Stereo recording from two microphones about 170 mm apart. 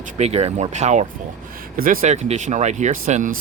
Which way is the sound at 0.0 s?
40° right (ahead or behind).